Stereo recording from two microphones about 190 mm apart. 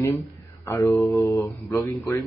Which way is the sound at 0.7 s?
15° left (ahead or behind).